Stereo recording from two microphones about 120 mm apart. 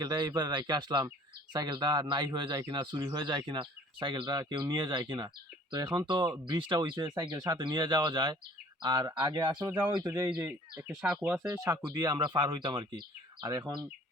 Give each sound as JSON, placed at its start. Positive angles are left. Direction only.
{"t": 0.0, "sound": "speech", "side_deg": -35}
{"t": 10.8, "sound": "speech", "side_deg": -10}
{"t": 11.4, "sound": "speech", "side_deg": -25}